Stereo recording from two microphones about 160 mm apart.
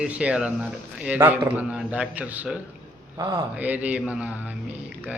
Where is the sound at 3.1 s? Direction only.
25° right (ahead or behind).